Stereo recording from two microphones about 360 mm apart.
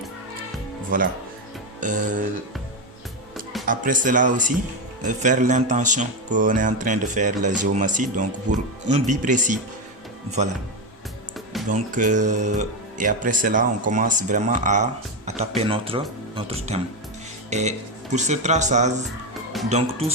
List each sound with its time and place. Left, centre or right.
0.9 s speech: right
3.7 s speech: right
8.5 s speech: right
8.9 s speech: centre
11.7 s speech: right